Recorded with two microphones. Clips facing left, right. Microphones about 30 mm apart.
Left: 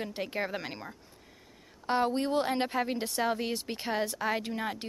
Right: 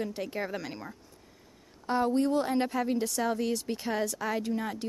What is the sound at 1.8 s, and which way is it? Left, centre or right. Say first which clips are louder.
Speech: right 2 dB; left.